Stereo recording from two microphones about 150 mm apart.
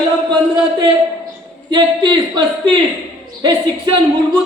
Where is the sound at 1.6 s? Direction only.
30° right (ahead or behind).